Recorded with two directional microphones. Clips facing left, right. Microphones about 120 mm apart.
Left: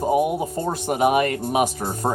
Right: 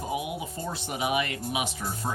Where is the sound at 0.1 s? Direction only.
45° left (ahead or behind).